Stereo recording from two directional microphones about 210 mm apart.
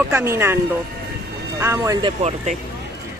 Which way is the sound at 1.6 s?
15° right (ahead or behind).